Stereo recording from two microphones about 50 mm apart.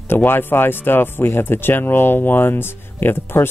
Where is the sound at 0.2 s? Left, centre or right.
Left.